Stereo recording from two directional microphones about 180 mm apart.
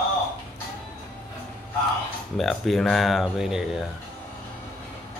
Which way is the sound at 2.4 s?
Centre (ahead or behind).